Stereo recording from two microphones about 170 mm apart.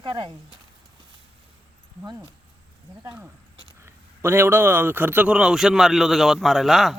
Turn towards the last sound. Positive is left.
turn(degrees=0)  # may be behind; listen again after turning